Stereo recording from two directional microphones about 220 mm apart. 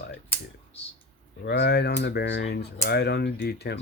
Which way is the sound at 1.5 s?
50° left (ahead or behind).